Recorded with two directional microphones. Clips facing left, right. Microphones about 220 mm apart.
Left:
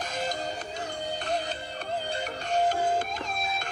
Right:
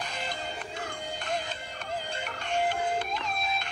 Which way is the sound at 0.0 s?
45° left (ahead or behind).